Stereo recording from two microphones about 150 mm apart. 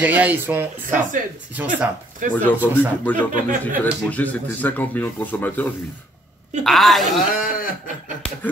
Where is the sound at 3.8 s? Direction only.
10° left (ahead or behind).